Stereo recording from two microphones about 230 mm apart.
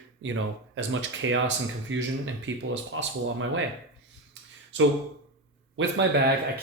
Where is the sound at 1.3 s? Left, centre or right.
Right.